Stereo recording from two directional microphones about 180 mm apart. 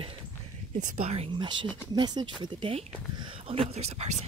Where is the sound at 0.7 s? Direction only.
40° right (ahead or behind).